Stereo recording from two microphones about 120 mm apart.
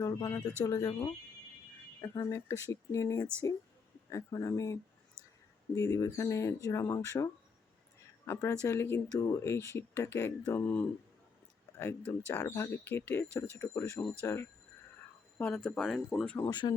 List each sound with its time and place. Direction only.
0.0 s speech: 30° left (ahead or behind)
12.3 s speech: 20° left (ahead or behind)
15.4 s speech: 10° left (ahead or behind)
16.2 s speech: 15° left (ahead or behind)
16.5 s speech: 35° left (ahead or behind)